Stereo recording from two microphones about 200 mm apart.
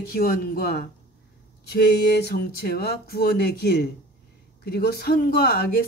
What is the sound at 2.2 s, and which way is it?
Speech, 50° left (ahead or behind).